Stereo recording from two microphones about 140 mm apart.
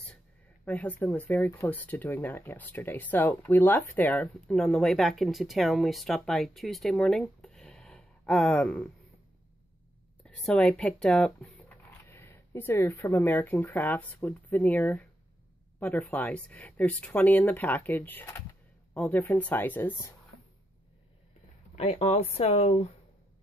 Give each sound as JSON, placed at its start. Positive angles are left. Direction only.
{"t": 0.7, "sound": "speech", "side_deg": 10}
{"t": 10.2, "sound": "speech", "side_deg": 5}
{"t": 21.7, "sound": "speech", "side_deg": 50}